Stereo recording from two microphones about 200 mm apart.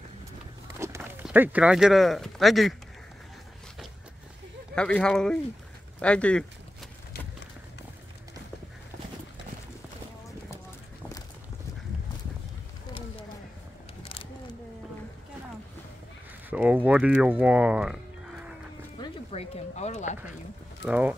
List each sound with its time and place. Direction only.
0.7 s speech: 15° right (ahead or behind)
4.7 s speech: 5° left (ahead or behind)
16.4 s a sound: 10° right (ahead or behind)
18.9 s music: 30° left (ahead or behind)
20.8 s speech: 5° right (ahead or behind)